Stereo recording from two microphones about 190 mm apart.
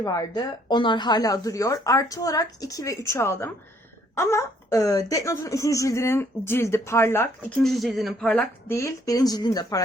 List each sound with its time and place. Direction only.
0.0 s a woman's voice: 20° left (ahead or behind)
7.6 s a woman's voice: centre (ahead or behind); by 9.8 s 20° left (ahead or behind)